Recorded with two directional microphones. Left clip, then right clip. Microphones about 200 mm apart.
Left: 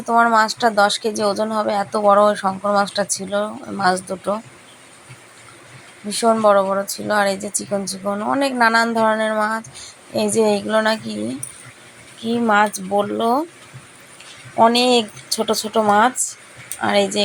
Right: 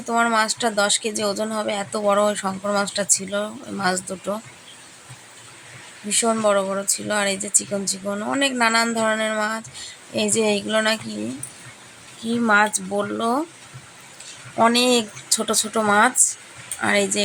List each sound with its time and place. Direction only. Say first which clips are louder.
0.0 s speech: left 5 dB; centre (ahead or behind)
6.1 s speech: left 5 dB; centre (ahead or behind)
12.2 s speech: left 2 dB; centre (ahead or behind)
14.5 s speech: left 3 dB; centre (ahead or behind)